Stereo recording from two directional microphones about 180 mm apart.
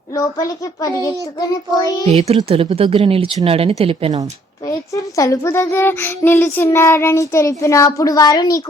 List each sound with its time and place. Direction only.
0.1 s child singing: 20° left (ahead or behind)
2.0 s speech: 35° right (ahead or behind)
5.1 s a child's voice: 20° left (ahead or behind)